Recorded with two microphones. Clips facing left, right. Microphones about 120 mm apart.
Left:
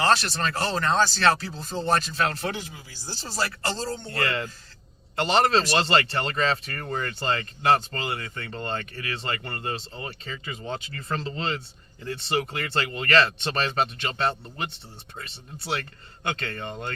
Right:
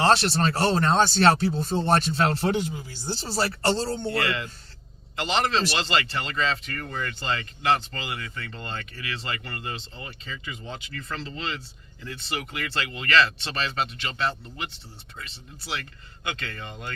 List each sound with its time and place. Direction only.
0.0 s speech: 30° right (ahead or behind)
4.2 s speech: 40° left (ahead or behind)
15.5 s speech: 30° left (ahead or behind)